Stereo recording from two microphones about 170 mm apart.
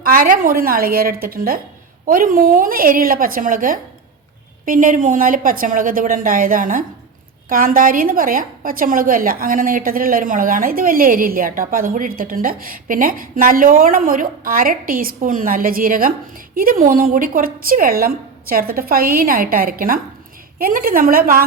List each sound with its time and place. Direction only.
0.0 s a woman's voice: 55° right (ahead or behind)